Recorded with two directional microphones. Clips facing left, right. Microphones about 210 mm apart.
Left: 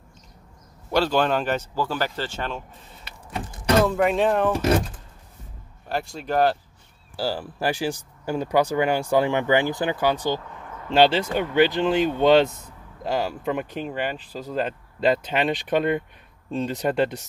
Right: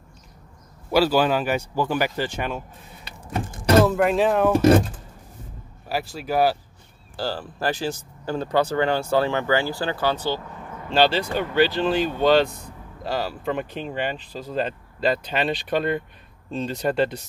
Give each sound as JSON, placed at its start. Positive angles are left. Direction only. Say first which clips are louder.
{"t": 0.9, "sound": "speech", "louder": "right 2 dB", "side_deg": -5}
{"t": 5.9, "sound": "speech", "louder": "even", "side_deg": -5}
{"t": 7.2, "sound": "speech", "louder": "left 1 dB", "side_deg": 10}